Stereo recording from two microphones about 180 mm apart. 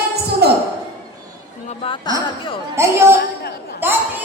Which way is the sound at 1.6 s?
30° left (ahead or behind).